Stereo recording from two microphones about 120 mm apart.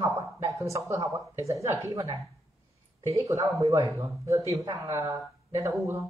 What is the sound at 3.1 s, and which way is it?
Speech, 25° right (ahead or behind).